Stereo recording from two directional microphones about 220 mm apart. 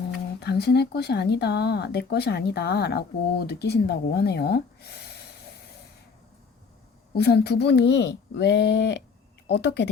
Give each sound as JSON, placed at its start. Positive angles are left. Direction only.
{"t": 0.3, "sound": "speech", "side_deg": 50}
{"t": 7.1, "sound": "speech", "side_deg": 45}